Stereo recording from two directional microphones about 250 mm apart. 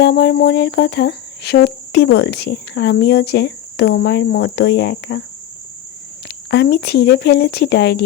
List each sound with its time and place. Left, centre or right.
0.0 s speech: left
6.2 s speech: left